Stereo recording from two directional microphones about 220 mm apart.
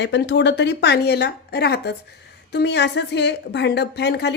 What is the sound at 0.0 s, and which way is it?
Speech, 50° left (ahead or behind).